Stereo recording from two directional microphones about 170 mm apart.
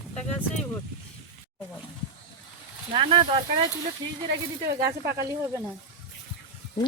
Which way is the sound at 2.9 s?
30° right (ahead or behind).